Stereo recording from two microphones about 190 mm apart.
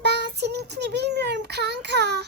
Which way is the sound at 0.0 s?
60° right (ahead or behind).